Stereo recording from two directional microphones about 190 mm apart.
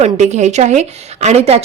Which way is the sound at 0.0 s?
35° right (ahead or behind).